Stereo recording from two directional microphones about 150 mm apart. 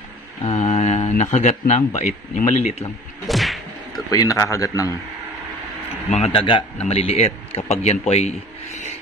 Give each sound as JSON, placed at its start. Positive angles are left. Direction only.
{"t": 0.4, "sound": "a sound", "side_deg": 45}
{"t": 2.0, "sound": "speech", "side_deg": 55}
{"t": 3.3, "sound": "whack", "side_deg": 0}
{"t": 4.1, "sound": "a man's voice", "side_deg": 25}
{"t": 6.0, "sound": "a man's voice", "side_deg": 45}